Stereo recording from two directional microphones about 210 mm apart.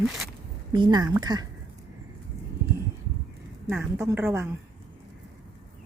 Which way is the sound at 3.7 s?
10° right (ahead or behind).